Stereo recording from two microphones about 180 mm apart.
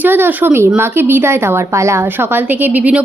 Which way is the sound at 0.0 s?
10° right (ahead or behind).